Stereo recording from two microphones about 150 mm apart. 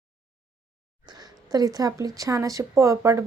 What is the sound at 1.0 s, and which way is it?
Speech, 25° right (ahead or behind).